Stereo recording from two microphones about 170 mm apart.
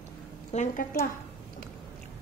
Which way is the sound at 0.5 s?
45° left (ahead or behind).